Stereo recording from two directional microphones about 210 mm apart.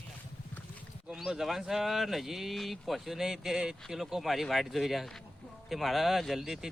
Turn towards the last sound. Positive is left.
turn(degrees=0)  # may be behind; listen again after turning